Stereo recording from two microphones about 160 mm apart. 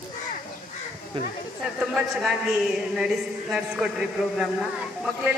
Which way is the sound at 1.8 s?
Centre (ahead or behind).